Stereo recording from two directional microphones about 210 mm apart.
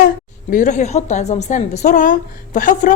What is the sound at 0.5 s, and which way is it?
A woman's voice, 35° left (ahead or behind).